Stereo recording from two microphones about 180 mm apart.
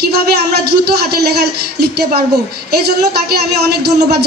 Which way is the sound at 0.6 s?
60° right (ahead or behind).